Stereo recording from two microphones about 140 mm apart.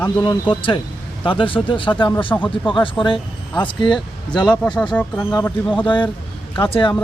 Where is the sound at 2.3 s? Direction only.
20° left (ahead or behind).